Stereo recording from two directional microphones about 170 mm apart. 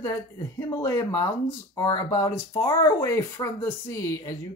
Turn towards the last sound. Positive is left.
turn(degrees=20)  # may be behind; listen again after turning